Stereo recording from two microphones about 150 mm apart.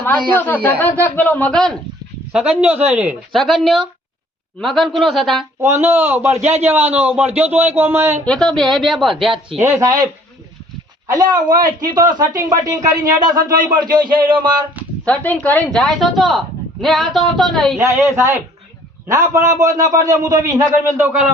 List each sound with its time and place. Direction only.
0.3 s speech: 15° left (ahead or behind)
2.3 s speech: 5° right (ahead or behind)
3.3 s speech: centre (ahead or behind)
5.5 s speech: 20° right (ahead or behind)
8.2 s speech: 5° left (ahead or behind)
9.6 s speech: 15° right (ahead or behind)
11.4 s a man's voice: 65° right (ahead or behind)
11.9 s speech: 30° right (ahead or behind)
13.6 s speech: 65° right (ahead or behind)
13.9 s music: 30° right (ahead or behind)
15.0 s speech: 10° left (ahead or behind)
17.7 s speech: 20° right (ahead or behind)
21.0 s speech: 10° right (ahead or behind)